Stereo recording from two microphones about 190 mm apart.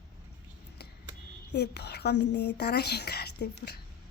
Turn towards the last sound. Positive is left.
turn(degrees=60)  # may be behind; listen again after turning